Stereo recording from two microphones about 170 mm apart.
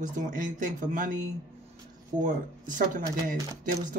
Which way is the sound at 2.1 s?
50° right (ahead or behind).